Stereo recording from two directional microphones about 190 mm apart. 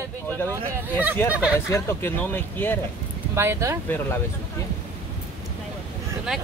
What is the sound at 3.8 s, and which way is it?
Speech, 10° left (ahead or behind).